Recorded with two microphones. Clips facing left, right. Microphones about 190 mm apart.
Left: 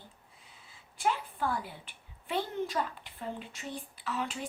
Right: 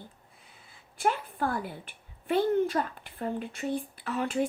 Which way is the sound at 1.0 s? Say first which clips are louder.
Right 3 dB; 50° right (ahead or behind).